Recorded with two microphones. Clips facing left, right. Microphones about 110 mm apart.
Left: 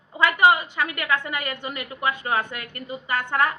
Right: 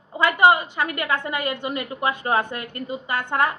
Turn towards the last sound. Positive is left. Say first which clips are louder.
# right 1 dB
turn(degrees=-20)  # may be behind; listen again after turning